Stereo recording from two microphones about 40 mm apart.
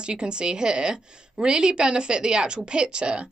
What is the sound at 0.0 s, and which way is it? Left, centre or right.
Speech, right.